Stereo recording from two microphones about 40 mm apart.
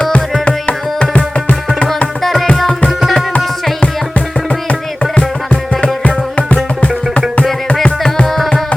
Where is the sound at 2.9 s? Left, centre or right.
Centre.